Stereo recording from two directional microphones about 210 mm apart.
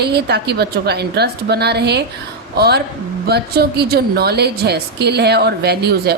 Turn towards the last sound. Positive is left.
turn(degrees=-50)  # may be behind; listen again after turning